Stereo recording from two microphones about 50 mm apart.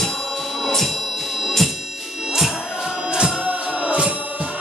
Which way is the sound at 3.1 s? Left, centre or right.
Centre.